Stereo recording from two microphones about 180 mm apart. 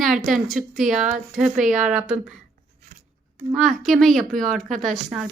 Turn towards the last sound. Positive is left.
turn(degrees=0)  # may be behind; listen again after turning